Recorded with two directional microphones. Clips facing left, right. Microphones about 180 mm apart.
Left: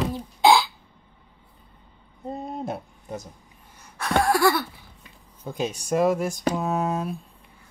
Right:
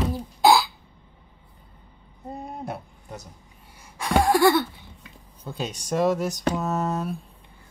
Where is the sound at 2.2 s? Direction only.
25° left (ahead or behind).